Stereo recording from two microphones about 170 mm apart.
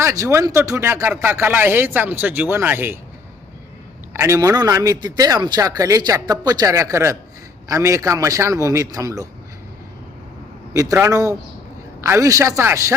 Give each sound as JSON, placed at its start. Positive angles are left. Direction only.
{"t": 0.0, "sound": "speech", "side_deg": -15}
{"t": 4.1, "sound": "a man's voice", "side_deg": -15}
{"t": 11.0, "sound": "a man's voice", "side_deg": -20}